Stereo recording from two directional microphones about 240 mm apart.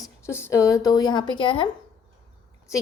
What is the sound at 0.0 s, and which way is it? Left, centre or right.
A woman's voice, centre.